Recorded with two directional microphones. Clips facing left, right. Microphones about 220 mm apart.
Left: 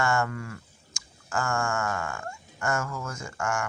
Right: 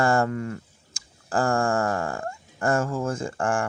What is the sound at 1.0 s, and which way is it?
Tick-tock, 35° right (ahead or behind).